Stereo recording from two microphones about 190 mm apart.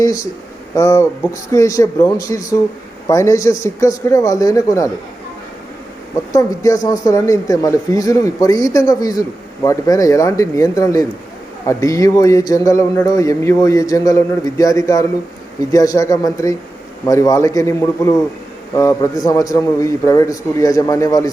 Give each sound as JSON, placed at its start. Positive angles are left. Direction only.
{"t": 0.0, "sound": "a sound", "side_deg": 15}
{"t": 0.7, "sound": "speech", "side_deg": 15}
{"t": 6.3, "sound": "speech", "side_deg": 15}